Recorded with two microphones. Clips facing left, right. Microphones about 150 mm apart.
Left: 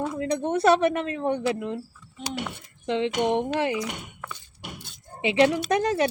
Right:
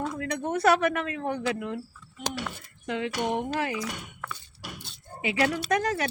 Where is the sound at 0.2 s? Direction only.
25° left (ahead or behind).